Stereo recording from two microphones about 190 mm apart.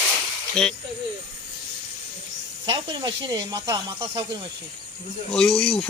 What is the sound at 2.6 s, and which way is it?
Speech, 25° right (ahead or behind).